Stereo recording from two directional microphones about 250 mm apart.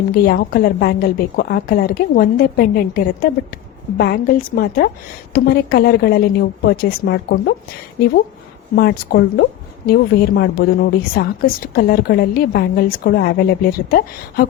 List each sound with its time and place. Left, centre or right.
0.1 s speech: left
8.7 s speech: left